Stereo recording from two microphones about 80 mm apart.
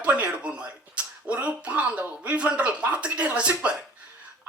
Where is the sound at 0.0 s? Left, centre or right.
Centre.